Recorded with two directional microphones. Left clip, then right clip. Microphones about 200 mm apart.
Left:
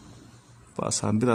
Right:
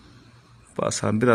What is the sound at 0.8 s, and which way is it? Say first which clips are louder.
Speech: right 4 dB; 15° right (ahead or behind).